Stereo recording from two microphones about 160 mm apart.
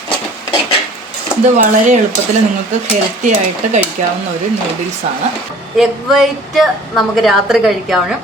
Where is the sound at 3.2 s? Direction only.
45° right (ahead or behind).